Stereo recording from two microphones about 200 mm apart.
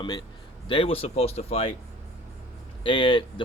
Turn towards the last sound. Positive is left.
turn(degrees=25)  # may be behind; listen again after turning